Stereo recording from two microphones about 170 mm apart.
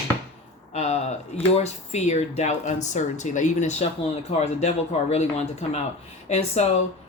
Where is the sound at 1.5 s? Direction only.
40° left (ahead or behind).